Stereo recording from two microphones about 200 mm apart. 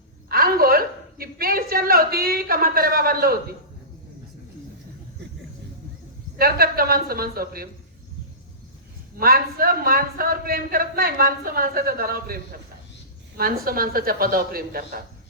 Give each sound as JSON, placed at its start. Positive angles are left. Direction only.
{"t": 0.3, "sound": "a sound", "side_deg": -50}
{"t": 6.3, "sound": "a man's voice", "side_deg": -50}
{"t": 9.1, "sound": "a man's voice", "side_deg": -45}